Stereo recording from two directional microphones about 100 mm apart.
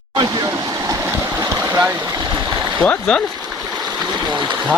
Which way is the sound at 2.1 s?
45° right (ahead or behind).